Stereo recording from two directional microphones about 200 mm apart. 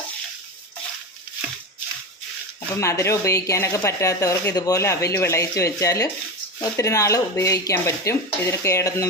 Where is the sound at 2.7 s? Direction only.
15° left (ahead or behind).